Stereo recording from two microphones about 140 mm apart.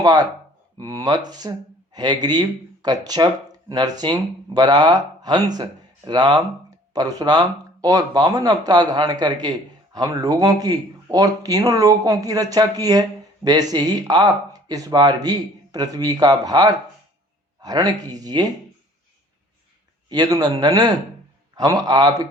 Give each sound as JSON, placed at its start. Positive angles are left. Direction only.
{"t": 0.0, "sound": "speech", "side_deg": -30}
{"t": 20.1, "sound": "speech", "side_deg": -25}